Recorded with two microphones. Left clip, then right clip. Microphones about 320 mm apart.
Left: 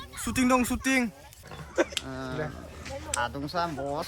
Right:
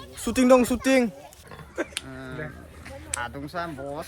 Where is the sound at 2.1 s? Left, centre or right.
Centre.